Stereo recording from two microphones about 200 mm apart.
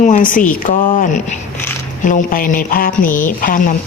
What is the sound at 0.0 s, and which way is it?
Speech, 40° left (ahead or behind).